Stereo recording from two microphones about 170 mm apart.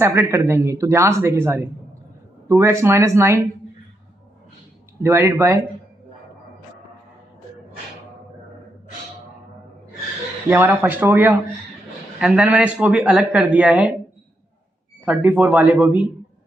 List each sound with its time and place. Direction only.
0.0 s speech: 15° right (ahead or behind)
5.0 s speech: 15° right (ahead or behind)
10.5 s speech: 15° right (ahead or behind)
15.0 s speech: 10° right (ahead or behind)